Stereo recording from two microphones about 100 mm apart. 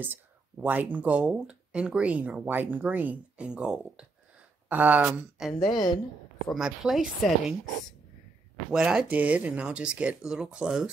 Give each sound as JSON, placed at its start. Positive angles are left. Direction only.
{"t": 0.0, "sound": "speech", "side_deg": -20}
{"t": 5.6, "sound": "a woman's voice", "side_deg": 45}
{"t": 6.5, "sound": "a woman's voice", "side_deg": -5}
{"t": 8.7, "sound": "speech", "side_deg": -5}